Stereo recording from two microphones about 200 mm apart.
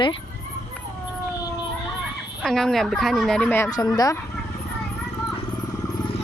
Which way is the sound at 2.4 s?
5° left (ahead or behind).